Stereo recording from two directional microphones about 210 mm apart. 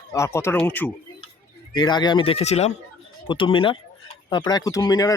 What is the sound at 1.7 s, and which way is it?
Speech, 20° left (ahead or behind).